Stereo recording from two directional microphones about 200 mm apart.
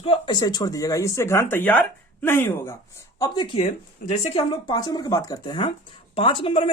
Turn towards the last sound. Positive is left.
turn(degrees=25)  # may be behind; listen again after turning